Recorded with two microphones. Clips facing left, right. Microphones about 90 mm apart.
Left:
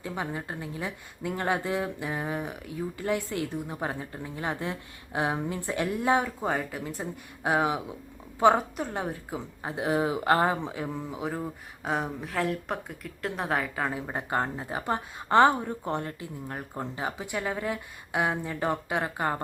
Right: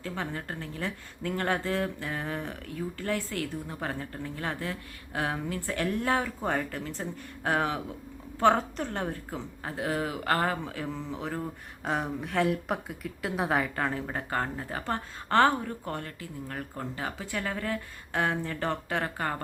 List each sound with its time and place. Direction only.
0.0 s speech: 15° left (ahead or behind)
14.1 s speech: 20° left (ahead or behind)